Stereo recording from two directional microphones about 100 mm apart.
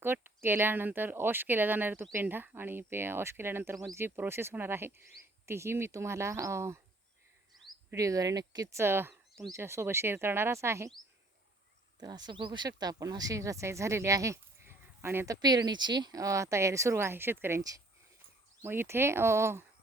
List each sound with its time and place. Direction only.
0.0 s speech: 20° right (ahead or behind)
7.9 s speech: 35° right (ahead or behind)
11.9 s speech: 45° right (ahead or behind); by 15.4 s 25° right (ahead or behind)
15.4 s speech: 40° right (ahead or behind); by 17.6 s 25° right (ahead or behind)
18.6 s speech: 25° right (ahead or behind)